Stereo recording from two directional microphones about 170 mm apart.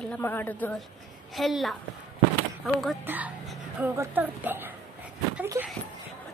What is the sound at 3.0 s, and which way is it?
A woman's voice, 10° right (ahead or behind).